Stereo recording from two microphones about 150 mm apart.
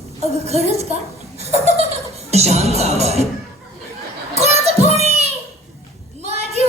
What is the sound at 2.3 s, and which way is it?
Speech, 45° right (ahead or behind).